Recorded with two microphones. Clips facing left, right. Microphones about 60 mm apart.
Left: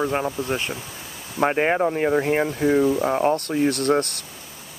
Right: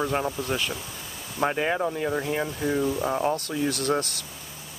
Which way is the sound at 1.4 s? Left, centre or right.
Left.